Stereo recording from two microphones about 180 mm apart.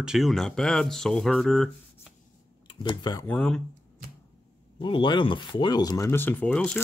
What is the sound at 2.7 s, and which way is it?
Speech, 25° left (ahead or behind).